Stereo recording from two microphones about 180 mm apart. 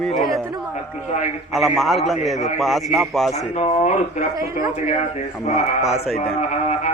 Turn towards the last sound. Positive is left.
turn(degrees=40)  # may be behind; listen again after turning